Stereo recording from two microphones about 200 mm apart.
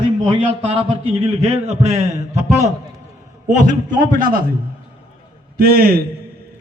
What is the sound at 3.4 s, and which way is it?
A man's voice, 40° right (ahead or behind).